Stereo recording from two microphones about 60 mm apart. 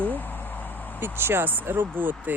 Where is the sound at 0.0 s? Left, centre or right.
Left.